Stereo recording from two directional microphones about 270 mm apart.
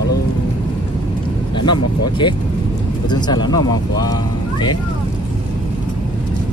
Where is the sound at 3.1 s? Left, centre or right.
Centre.